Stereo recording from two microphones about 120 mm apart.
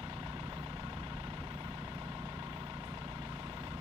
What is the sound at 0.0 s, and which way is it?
Vehicle, 40° right (ahead or behind).